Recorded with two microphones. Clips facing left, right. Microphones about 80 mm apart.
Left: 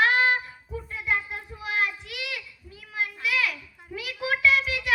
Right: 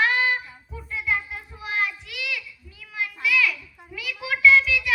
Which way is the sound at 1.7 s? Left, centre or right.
Left.